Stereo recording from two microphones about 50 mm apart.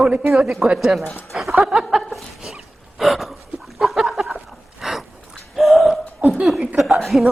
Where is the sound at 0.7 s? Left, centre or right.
Centre.